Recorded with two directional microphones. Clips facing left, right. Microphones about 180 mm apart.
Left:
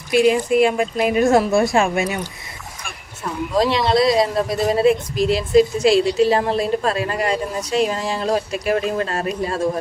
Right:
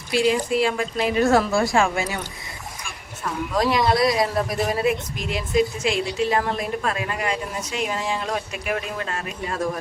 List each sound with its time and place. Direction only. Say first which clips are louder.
0.3 s a woman's voice: left 4 dB; 20° left (ahead or behind)
3.5 s a woman's voice: left 3 dB; 25° left (ahead or behind)